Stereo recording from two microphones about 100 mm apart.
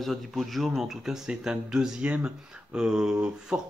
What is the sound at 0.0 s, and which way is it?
Speech, centre (ahead or behind).